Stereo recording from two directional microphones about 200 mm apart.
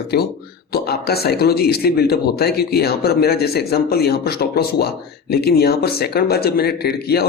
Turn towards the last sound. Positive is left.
turn(degrees=50)  # may be behind; listen again after turning